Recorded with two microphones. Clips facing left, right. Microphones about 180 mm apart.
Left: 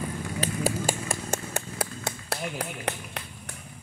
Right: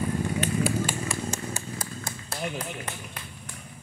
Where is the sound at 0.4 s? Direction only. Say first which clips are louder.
Left 1 dB; 40° left (ahead or behind); by 3.3 s 70° left (ahead or behind).